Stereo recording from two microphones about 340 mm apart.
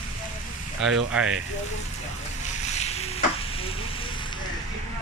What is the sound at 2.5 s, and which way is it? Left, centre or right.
Boat, centre.